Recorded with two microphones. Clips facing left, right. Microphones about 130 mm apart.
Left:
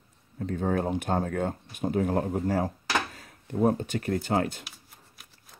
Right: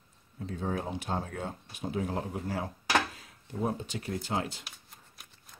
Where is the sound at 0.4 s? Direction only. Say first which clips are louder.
Left 7 dB; 55° left (ahead or behind).